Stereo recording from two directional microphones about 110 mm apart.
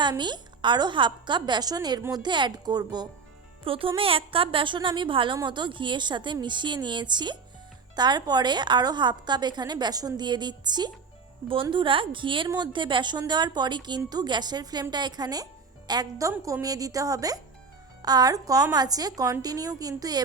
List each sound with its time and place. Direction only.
0.0 s a woman's voice: 40° right (ahead or behind)
3.6 s a woman's voice: 55° right (ahead or behind); by 20.2 s 35° right (ahead or behind)